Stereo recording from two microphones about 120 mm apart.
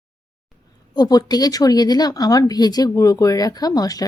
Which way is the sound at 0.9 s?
35° left (ahead or behind).